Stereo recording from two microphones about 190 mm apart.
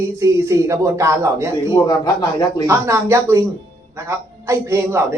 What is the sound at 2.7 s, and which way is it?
A man's voice, 15° right (ahead or behind).